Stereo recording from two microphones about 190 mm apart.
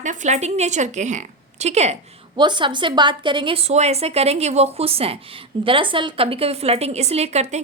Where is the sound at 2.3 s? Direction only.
25° right (ahead or behind).